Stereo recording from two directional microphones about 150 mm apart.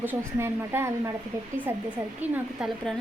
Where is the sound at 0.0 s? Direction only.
15° right (ahead or behind).